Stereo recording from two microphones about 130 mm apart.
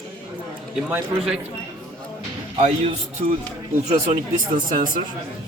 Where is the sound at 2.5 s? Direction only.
50° right (ahead or behind).